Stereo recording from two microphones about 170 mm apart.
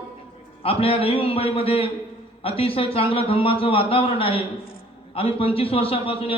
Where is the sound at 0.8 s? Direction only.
35° left (ahead or behind).